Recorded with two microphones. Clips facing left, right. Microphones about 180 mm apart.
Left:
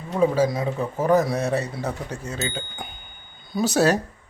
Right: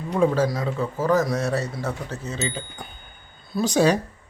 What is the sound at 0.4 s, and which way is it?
A man's voice, 20° left (ahead or behind).